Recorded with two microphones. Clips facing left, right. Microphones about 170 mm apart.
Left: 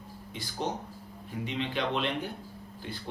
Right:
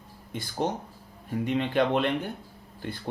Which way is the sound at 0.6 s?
50° right (ahead or behind).